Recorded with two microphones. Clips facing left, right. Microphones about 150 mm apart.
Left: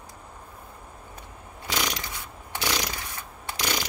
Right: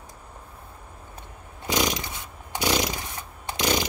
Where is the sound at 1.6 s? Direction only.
20° right (ahead or behind).